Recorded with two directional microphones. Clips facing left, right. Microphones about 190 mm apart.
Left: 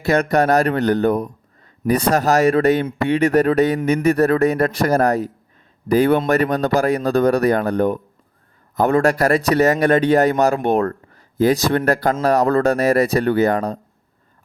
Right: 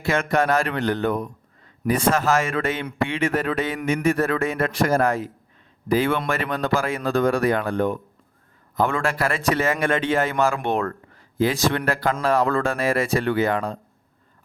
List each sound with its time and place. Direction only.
0.0 s a man's voice: 40° left (ahead or behind)